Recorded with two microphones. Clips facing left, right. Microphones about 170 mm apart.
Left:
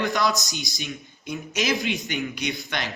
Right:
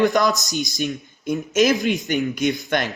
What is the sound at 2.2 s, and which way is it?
Speech, 45° right (ahead or behind).